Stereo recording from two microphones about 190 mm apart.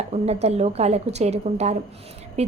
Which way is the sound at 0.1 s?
35° right (ahead or behind).